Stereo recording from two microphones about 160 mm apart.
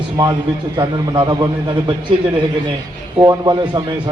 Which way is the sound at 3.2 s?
25° right (ahead or behind).